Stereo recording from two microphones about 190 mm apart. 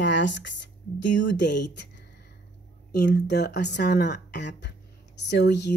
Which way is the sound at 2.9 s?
60° left (ahead or behind).